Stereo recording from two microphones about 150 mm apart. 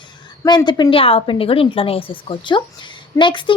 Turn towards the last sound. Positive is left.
turn(degrees=30)  # may be behind; listen again after turning